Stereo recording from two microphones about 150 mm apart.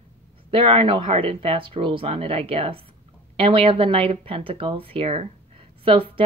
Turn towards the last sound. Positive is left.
turn(degrees=-35)  # may be behind; listen again after turning